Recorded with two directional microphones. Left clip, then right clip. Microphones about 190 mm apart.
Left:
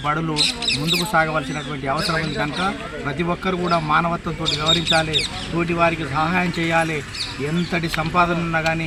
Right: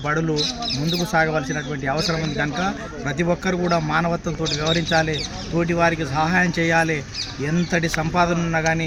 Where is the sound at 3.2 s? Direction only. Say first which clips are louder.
Right 2 dB; 20° right (ahead or behind).